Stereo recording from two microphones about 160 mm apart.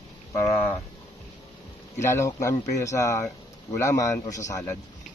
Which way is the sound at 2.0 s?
15° left (ahead or behind).